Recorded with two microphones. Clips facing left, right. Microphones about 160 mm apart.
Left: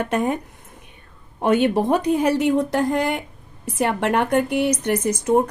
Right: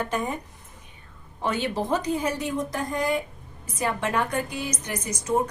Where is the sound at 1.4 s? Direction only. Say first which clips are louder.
Left 9 dB; 55° left (ahead or behind).